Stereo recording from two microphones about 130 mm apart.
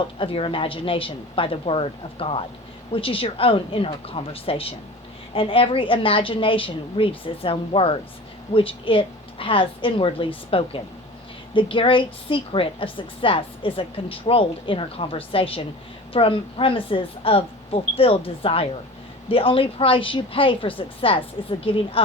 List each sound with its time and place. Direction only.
0.2 s a woman's voice: 45° left (ahead or behind)